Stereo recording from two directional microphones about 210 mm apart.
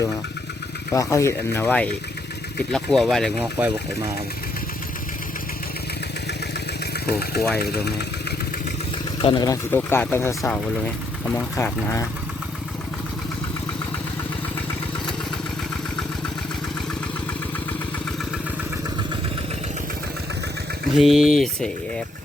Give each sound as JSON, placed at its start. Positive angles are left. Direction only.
{"t": 0.9, "sound": "speech", "side_deg": 15}
{"t": 7.1, "sound": "speech", "side_deg": 45}
{"t": 9.2, "sound": "speech", "side_deg": 20}
{"t": 20.9, "sound": "speech", "side_deg": 0}